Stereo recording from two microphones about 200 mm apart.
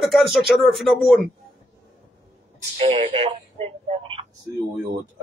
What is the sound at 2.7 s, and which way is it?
Speech, 30° right (ahead or behind).